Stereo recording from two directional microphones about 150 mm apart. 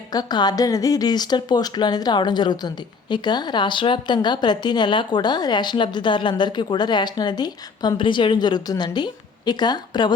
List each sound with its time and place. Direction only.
0.1 s speech: 25° left (ahead or behind)